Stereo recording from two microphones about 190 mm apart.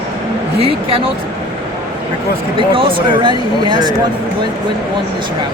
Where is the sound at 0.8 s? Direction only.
30° right (ahead or behind).